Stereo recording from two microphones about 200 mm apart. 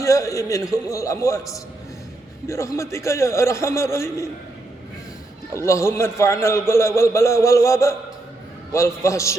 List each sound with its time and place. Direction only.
0.0 s a man's voice: 15° left (ahead or behind)
5.5 s a man's voice: 15° left (ahead or behind)